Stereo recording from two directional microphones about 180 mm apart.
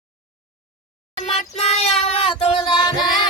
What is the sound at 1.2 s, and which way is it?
Child singing, 35° left (ahead or behind).